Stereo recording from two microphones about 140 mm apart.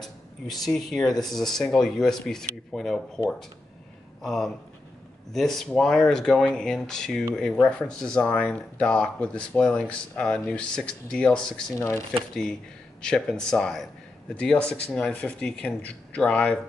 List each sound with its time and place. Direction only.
0.0 s speech: centre (ahead or behind)
13.0 s speech: 5° left (ahead or behind)